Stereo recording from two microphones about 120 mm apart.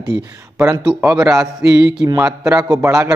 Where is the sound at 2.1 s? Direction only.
25° right (ahead or behind).